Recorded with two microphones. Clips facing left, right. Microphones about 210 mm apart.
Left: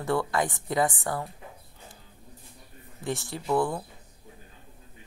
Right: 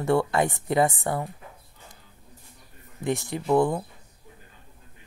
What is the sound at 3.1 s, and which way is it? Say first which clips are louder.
Speech: right 5 dB; 20° right (ahead or behind).